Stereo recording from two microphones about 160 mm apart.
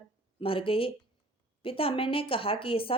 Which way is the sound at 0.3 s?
35° left (ahead or behind).